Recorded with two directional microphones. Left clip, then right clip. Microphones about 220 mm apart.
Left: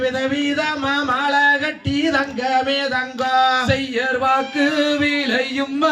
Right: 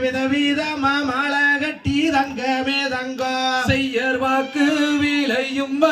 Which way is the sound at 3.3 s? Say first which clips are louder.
Left 5 dB; 40° right (ahead or behind).